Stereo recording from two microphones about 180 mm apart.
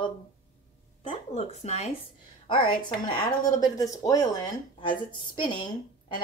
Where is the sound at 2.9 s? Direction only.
25° left (ahead or behind).